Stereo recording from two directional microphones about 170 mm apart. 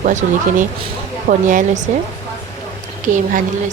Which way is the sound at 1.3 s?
50° right (ahead or behind).